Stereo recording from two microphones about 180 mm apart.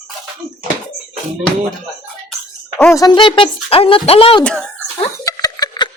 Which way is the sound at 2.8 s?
15° left (ahead or behind).